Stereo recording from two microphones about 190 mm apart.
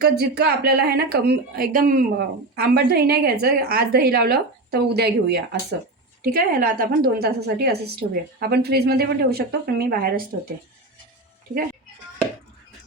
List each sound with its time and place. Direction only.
0.0 s a woman's voice: 55° right (ahead or behind)